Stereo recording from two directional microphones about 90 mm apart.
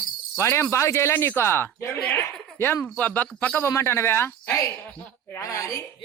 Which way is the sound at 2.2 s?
25° left (ahead or behind).